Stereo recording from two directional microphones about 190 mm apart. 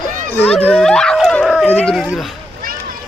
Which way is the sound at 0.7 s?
5° left (ahead or behind).